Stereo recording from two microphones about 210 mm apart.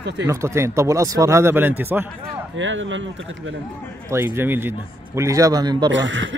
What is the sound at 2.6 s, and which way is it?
Speech, 65° right (ahead or behind).